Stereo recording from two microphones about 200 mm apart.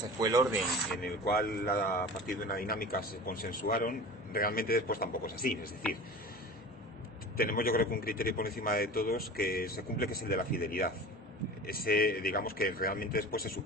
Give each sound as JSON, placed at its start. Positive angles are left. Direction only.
{"t": 0.2, "sound": "speech", "side_deg": -15}
{"t": 1.0, "sound": "a man's voice", "side_deg": 50}
{"t": 7.3, "sound": "a man's voice", "side_deg": 45}